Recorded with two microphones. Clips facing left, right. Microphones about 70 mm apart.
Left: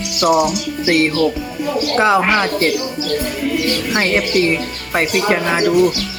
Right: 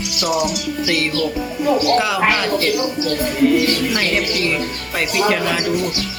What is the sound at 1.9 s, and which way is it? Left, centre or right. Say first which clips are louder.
Speech: left 3 dB; left.